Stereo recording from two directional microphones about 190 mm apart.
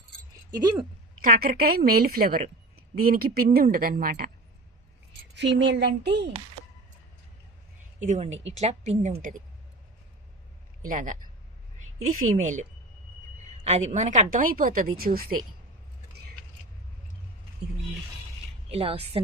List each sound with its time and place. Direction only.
0.5 s speech: 20° right (ahead or behind)
1.2 s a woman's voice: 50° right (ahead or behind)
5.3 s speech: 65° right (ahead or behind)
7.9 s a woman's voice: 40° right (ahead or behind)
10.8 s a woman's voice: 45° right (ahead or behind)
12.2 s a woman's voice: 40° right (ahead or behind)
18.7 s a woman's voice: 30° right (ahead or behind)